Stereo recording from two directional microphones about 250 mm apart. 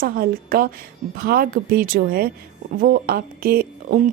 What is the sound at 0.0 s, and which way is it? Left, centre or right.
Speech, right.